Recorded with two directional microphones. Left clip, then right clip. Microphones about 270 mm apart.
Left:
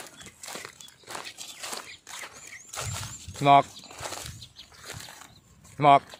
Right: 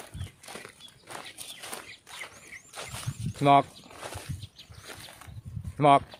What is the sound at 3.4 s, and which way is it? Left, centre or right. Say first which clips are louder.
Speech: left 2 dB; centre.